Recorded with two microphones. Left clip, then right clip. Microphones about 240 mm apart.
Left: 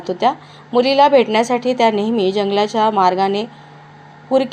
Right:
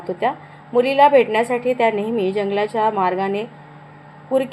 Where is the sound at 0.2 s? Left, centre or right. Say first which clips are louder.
Left 6 dB; left.